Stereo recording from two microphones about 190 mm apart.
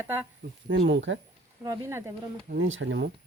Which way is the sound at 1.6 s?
15° right (ahead or behind).